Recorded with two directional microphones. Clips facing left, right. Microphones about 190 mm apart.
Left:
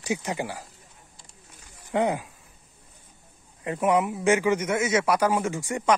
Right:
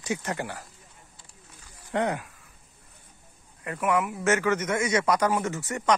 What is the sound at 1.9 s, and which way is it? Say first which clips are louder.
Speech: left 3 dB; 10° left (ahead or behind).